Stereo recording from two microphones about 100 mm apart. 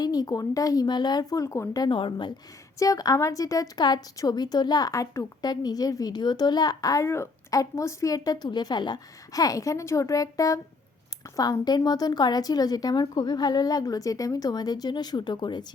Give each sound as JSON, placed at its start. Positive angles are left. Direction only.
{"t": 0.0, "sound": "a woman's voice", "side_deg": 40}
{"t": 1.8, "sound": "a woman's voice", "side_deg": 55}
{"t": 2.7, "sound": "a woman's voice", "side_deg": 35}